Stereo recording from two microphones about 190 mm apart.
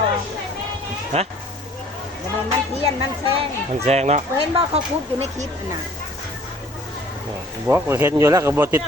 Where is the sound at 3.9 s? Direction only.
35° right (ahead or behind).